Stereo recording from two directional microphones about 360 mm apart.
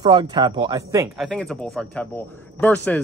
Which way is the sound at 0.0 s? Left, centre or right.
Centre.